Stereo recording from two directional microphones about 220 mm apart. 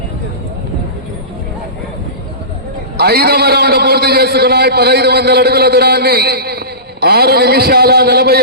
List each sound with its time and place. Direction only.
3.0 s a man's voice: 45° right (ahead or behind)